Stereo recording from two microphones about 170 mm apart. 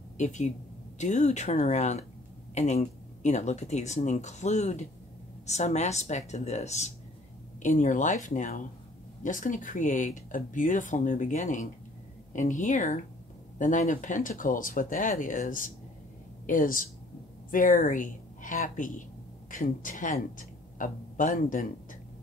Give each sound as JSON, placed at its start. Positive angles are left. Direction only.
{"t": 0.2, "sound": "a woman's voice", "side_deg": 45}